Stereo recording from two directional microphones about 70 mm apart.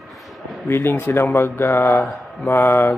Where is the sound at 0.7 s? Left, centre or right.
Left.